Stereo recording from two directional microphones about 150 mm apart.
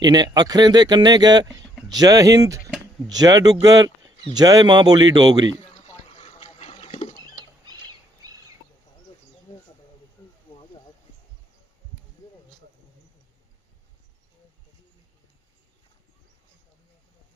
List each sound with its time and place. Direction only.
0.0 s speech: 25° right (ahead or behind)
6.1 s a sound: 40° left (ahead or behind)
10.2 s snake: 20° left (ahead or behind)